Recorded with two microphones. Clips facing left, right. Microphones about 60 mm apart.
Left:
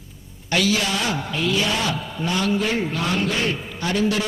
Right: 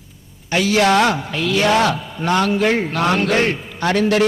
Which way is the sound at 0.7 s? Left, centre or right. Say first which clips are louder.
Right 8 dB; right.